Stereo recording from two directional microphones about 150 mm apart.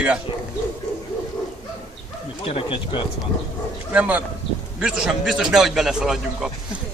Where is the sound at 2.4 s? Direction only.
40° left (ahead or behind).